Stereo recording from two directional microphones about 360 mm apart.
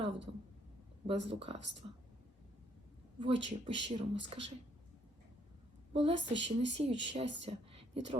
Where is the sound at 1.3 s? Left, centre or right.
Centre.